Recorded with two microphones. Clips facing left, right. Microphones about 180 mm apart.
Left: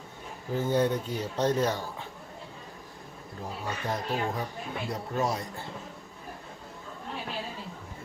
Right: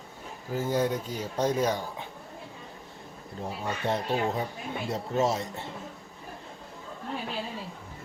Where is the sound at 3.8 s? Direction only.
25° right (ahead or behind).